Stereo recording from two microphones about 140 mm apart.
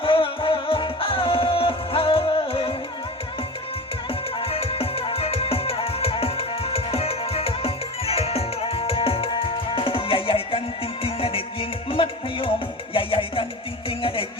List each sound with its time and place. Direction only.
0.0 s music: 40° left (ahead or behind)
4.4 s music: 40° left (ahead or behind)